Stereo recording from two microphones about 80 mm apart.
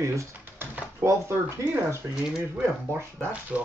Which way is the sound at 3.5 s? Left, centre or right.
Centre.